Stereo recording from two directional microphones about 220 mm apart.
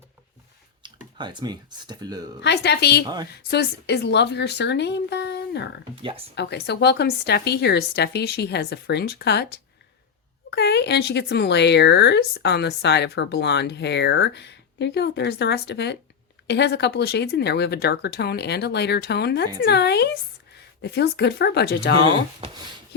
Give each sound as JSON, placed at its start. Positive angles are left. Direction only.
{"t": 0.8, "sound": "speech", "side_deg": -20}
{"t": 2.4, "sound": "speech", "side_deg": 50}